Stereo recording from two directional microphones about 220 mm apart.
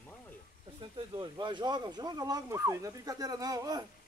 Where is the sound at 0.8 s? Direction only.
20° right (ahead or behind).